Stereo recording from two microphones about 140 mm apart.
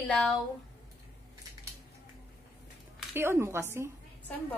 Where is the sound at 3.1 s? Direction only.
20° right (ahead or behind).